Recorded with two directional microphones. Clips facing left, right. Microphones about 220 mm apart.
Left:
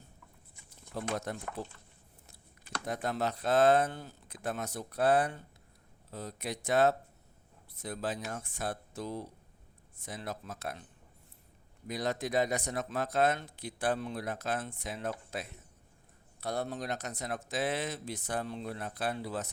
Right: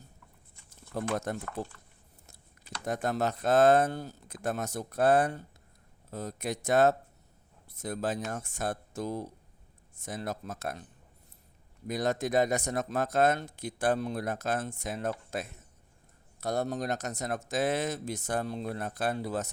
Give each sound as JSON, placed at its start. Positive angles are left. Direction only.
{"t": 0.9, "sound": "speech", "side_deg": -50}
{"t": 2.8, "sound": "speech", "side_deg": -45}
{"t": 11.9, "sound": "speech", "side_deg": -45}